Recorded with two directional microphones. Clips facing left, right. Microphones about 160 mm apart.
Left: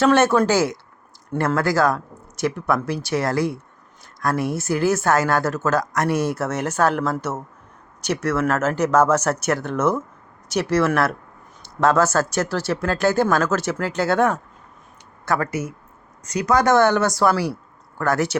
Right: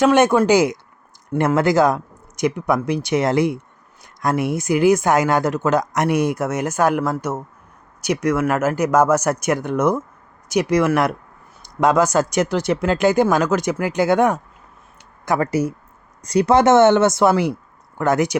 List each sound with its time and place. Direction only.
0.0 s speech: 15° right (ahead or behind)
15.4 s speech: 35° right (ahead or behind); by 18.3 s 20° right (ahead or behind)